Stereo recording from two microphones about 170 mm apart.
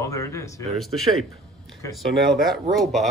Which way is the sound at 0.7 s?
Centre (ahead or behind).